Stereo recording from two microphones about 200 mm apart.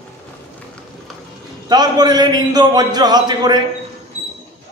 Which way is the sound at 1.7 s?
20° right (ahead or behind).